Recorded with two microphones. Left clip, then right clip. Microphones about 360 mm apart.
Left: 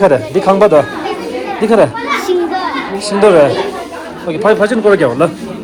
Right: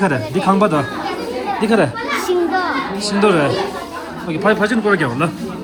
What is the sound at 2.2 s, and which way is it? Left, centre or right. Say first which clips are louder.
Children playing: right 1 dB; right.